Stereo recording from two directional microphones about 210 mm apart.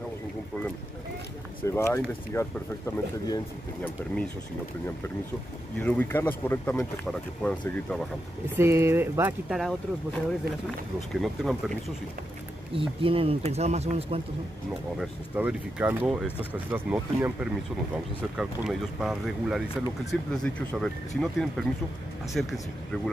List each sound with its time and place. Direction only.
1.6 s speech: 15° left (ahead or behind)
3.8 s speech: 5° left (ahead or behind)
5.8 s speech: 10° left (ahead or behind)
8.5 s speech: 10° right (ahead or behind)
12.7 s speech: 25° right (ahead or behind)
15.0 s speech: 5° right (ahead or behind)